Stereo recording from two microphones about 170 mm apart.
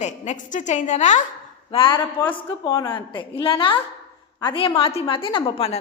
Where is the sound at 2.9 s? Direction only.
30° left (ahead or behind).